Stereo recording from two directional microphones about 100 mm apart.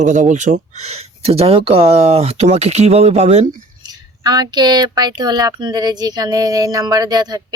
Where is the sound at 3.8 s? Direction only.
40° right (ahead or behind).